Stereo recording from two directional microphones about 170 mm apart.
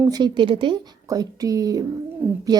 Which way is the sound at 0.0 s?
25° right (ahead or behind).